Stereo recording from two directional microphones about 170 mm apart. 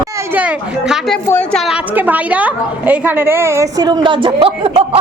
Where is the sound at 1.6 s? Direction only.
5° right (ahead or behind).